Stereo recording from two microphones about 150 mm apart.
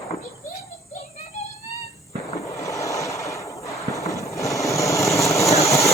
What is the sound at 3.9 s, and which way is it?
Vehicle, 20° left (ahead or behind).